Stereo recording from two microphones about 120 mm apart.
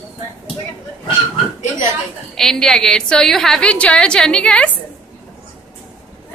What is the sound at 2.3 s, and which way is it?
A woman's voice, 5° left (ahead or behind).